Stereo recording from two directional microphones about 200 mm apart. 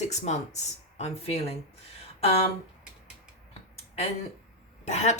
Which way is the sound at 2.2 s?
30° left (ahead or behind).